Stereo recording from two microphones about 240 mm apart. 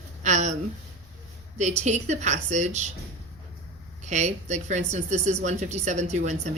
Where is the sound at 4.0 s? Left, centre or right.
Right.